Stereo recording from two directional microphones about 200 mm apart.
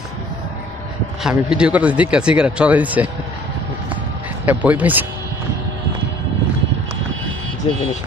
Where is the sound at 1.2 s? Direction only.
5° right (ahead or behind).